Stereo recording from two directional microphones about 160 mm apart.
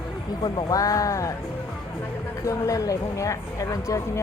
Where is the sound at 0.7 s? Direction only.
20° left (ahead or behind).